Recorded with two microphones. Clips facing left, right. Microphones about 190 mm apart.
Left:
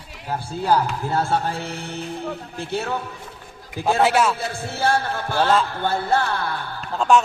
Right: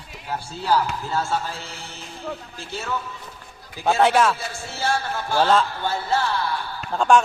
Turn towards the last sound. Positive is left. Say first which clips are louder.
# even
turn(degrees=-5)  # may be behind; listen again after turning